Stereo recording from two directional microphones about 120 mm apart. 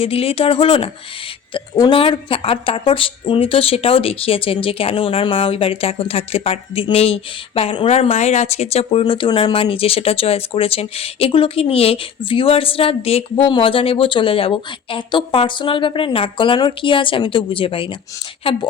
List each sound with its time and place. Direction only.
0.0 s speech: 55° left (ahead or behind)
1.5 s a woman's voice: 35° left (ahead or behind)
1.9 s speech: 50° left (ahead or behind)